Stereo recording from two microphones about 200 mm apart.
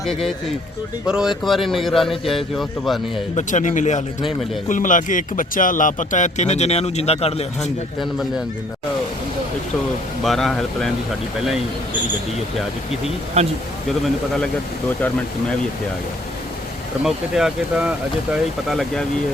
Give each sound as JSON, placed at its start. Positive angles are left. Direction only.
{"t": 0.0, "sound": "speech", "side_deg": 0}
{"t": 3.3, "sound": "speech", "side_deg": 40}
{"t": 10.2, "sound": "speech", "side_deg": 0}
{"t": 13.4, "sound": "speech", "side_deg": -30}
{"t": 14.0, "sound": "speech", "side_deg": 5}
{"t": 17.0, "sound": "speech", "side_deg": -5}